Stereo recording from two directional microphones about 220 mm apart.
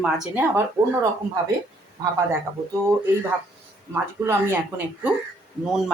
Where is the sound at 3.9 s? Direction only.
10° right (ahead or behind).